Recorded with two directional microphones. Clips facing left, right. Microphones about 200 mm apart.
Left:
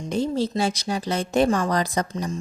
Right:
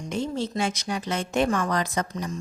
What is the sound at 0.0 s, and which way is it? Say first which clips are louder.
Speech: left 4 dB; 35° left (ahead or behind).